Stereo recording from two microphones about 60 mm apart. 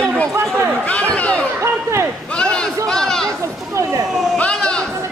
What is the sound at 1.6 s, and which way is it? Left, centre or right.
Speech, right.